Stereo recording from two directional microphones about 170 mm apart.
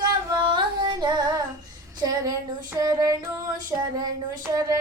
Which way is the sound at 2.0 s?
20° right (ahead or behind).